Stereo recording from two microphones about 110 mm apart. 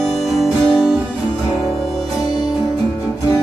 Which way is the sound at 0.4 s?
Centre (ahead or behind).